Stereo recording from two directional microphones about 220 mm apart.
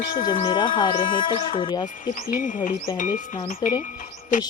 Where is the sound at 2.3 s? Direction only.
35° left (ahead or behind).